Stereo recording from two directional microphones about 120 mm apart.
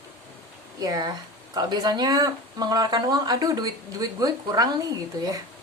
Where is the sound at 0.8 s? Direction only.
35° right (ahead or behind).